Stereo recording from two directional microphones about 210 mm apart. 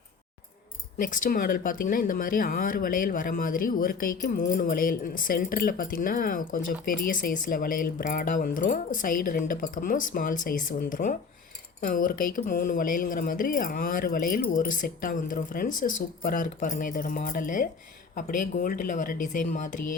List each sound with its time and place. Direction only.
1.0 s speech: 40° left (ahead or behind)